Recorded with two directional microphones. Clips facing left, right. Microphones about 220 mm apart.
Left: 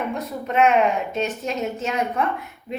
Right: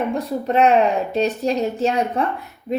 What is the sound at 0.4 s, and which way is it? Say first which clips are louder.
A woman's voice: right 2 dB; 35° right (ahead or behind).